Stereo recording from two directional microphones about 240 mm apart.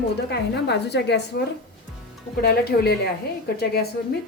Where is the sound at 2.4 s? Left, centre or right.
Left.